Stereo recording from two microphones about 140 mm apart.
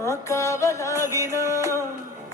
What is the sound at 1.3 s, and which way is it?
Music, 20° right (ahead or behind).